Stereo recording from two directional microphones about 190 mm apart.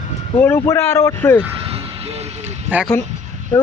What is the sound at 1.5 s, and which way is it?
Vehicle, 30° right (ahead or behind).